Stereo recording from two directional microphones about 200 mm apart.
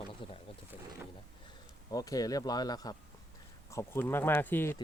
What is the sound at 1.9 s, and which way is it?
Speech, 15° left (ahead or behind).